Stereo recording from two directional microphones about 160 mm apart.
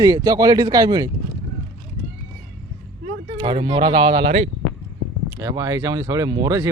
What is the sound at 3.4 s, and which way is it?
Speech, 30° right (ahead or behind).